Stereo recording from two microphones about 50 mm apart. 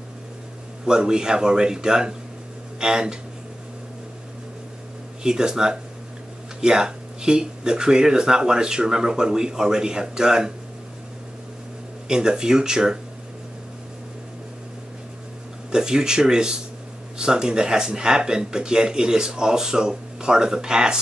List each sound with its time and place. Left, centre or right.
0.8 s speech: centre
5.2 s speech: centre
12.1 s speech: centre
15.7 s speech: centre